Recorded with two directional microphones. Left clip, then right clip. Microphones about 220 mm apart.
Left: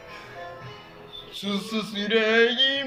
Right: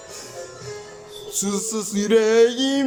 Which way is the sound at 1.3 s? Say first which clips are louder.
Right 4 dB; 30° right (ahead or behind).